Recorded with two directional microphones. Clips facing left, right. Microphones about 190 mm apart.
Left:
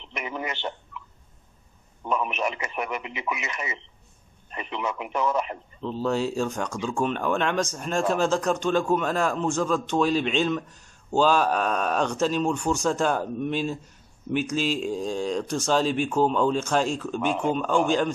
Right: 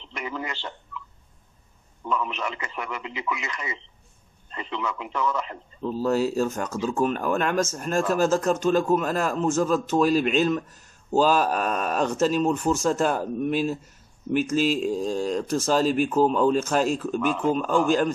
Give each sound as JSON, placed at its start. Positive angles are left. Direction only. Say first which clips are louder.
{"t": 0.0, "sound": "a man's voice", "louder": "even", "side_deg": 20}
{"t": 2.0, "sound": "speech", "louder": "left 1 dB", "side_deg": 20}
{"t": 5.8, "sound": "a man's voice", "louder": "right 3 dB", "side_deg": -5}